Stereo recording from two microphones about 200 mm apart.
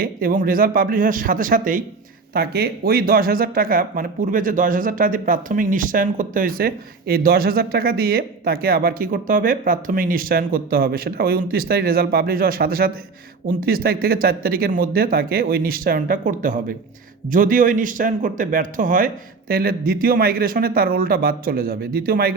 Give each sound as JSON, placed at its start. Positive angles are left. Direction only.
{"t": 0.0, "sound": "speech", "side_deg": -45}